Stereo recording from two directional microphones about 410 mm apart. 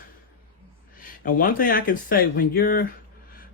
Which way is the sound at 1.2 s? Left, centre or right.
Left.